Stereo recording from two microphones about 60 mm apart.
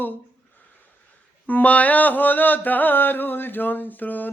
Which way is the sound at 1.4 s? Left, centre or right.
Left.